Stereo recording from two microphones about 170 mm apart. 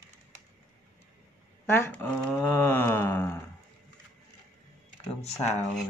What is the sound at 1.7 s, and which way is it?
Speech, 10° left (ahead or behind).